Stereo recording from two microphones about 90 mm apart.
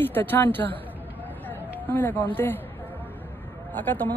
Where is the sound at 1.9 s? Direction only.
20° left (ahead or behind).